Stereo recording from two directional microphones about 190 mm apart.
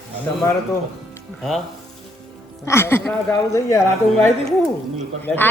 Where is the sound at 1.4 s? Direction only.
Centre (ahead or behind).